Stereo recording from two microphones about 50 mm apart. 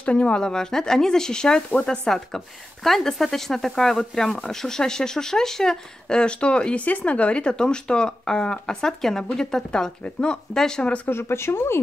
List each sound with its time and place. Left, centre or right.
0.0 s speech: left
2.0 s speech: centre
11.1 s speech: left